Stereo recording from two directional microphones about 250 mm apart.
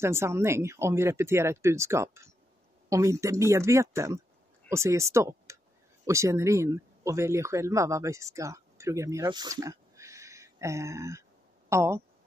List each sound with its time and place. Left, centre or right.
0.0 s speech: centre